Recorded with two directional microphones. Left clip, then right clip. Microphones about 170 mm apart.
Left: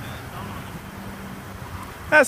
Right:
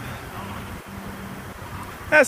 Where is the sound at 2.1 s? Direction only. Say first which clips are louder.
Even; 15° left (ahead or behind).